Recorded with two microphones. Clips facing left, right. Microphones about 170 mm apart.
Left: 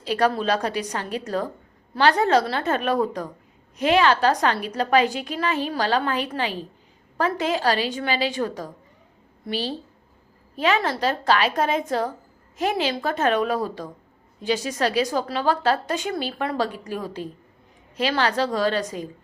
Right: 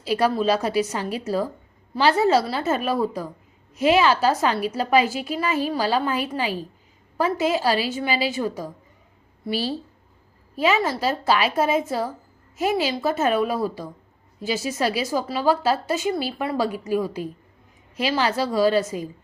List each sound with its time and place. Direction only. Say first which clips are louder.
0.0 s a woman's voice: right 1 dB; 10° right (ahead or behind)